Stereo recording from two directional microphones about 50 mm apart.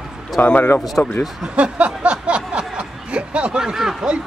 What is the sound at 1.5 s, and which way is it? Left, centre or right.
Speech, right.